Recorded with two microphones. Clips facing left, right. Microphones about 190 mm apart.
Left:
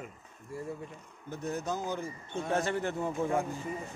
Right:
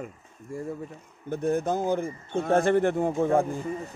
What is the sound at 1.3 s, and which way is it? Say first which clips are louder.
A man's voice: right 9 dB; 55° right (ahead or behind).